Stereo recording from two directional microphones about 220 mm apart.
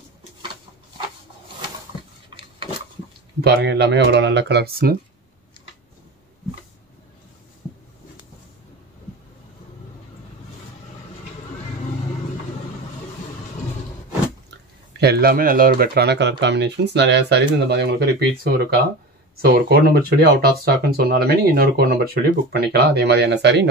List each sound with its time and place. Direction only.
3.3 s speech: 50° right (ahead or behind)
15.0 s speech: 45° right (ahead or behind)